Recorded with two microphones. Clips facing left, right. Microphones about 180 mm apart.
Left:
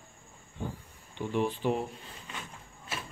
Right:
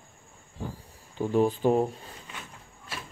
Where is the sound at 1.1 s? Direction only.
40° right (ahead or behind).